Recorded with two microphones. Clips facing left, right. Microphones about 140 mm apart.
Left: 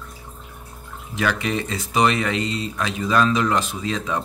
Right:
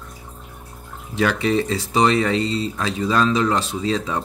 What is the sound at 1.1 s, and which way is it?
A man's voice, 30° right (ahead or behind).